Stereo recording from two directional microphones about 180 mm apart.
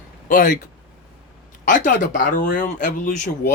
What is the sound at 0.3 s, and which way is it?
Speech, 50° left (ahead or behind).